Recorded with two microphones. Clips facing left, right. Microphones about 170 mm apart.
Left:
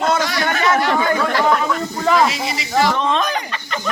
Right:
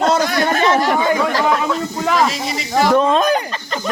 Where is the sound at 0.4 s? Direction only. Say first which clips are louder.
Right 1 dB; 30° right (ahead or behind).